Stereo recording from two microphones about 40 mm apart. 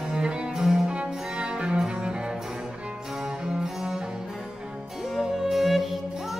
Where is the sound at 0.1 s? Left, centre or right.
Centre.